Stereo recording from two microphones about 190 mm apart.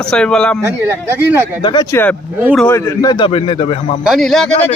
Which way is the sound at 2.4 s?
5° right (ahead or behind).